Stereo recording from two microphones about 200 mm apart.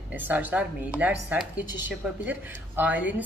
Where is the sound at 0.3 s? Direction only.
10° right (ahead or behind).